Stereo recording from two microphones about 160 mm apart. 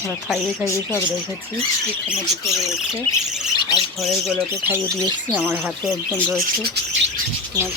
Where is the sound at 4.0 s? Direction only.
Centre (ahead or behind).